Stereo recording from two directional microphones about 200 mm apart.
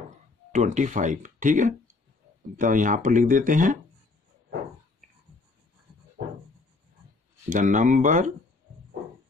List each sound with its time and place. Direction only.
0.5 s speech: 40° right (ahead or behind)
7.4 s speech: 40° right (ahead or behind)